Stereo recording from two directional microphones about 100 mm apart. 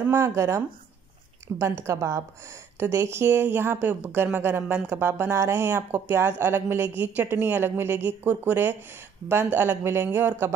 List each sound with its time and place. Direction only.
0.1 s speech: 30° right (ahead or behind)
1.6 s a woman's voice: 30° right (ahead or behind)